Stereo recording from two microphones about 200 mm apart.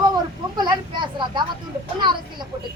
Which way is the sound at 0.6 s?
20° right (ahead or behind).